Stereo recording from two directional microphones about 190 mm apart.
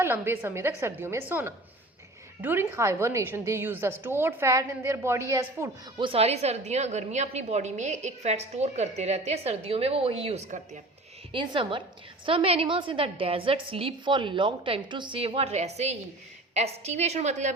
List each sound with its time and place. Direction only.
0.0 s a woman's voice: 10° right (ahead or behind)
6.0 s a woman's voice: 30° right (ahead or behind)
11.3 s a woman's voice: 25° right (ahead or behind)